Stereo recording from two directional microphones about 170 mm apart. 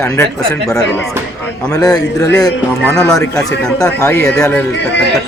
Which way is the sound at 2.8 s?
5° left (ahead or behind).